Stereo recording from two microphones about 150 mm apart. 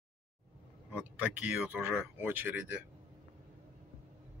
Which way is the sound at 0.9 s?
10° right (ahead or behind).